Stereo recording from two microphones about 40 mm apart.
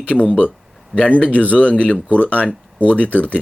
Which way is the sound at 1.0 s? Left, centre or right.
Left.